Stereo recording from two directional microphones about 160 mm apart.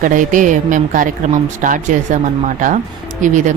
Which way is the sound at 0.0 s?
55° right (ahead or behind).